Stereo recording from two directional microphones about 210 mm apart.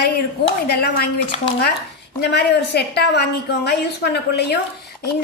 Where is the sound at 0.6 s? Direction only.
50° left (ahead or behind).